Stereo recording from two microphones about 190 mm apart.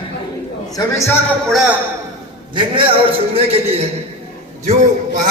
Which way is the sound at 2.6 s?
25° right (ahead or behind).